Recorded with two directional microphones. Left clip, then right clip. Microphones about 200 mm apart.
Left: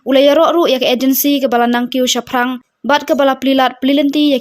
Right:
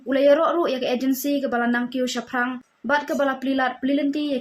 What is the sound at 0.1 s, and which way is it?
Speech, 50° left (ahead or behind).